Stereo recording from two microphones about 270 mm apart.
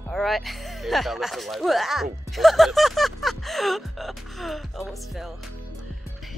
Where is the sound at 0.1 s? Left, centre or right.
Centre.